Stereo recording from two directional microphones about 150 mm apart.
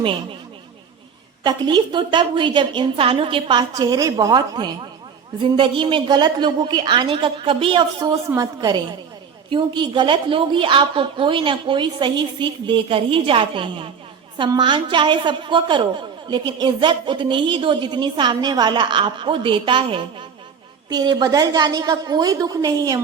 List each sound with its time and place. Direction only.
0.0 s a woman's voice: 35° right (ahead or behind)
1.5 s a woman's voice: 30° right (ahead or behind)